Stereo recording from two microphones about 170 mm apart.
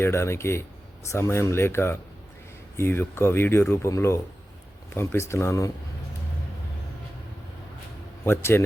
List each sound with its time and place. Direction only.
0.0 s speech: 15° left (ahead or behind)
8.2 s speech: 15° left (ahead or behind)